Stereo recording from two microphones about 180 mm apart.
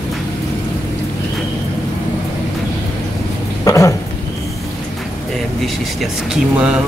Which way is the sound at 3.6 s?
15° left (ahead or behind).